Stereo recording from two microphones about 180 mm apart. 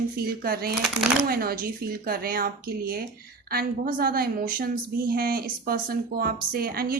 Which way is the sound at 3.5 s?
55° right (ahead or behind).